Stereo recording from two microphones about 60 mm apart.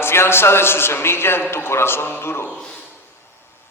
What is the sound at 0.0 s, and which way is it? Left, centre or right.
A man's voice, left.